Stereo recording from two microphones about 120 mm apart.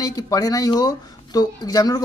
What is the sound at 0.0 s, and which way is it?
Speech, 30° left (ahead or behind).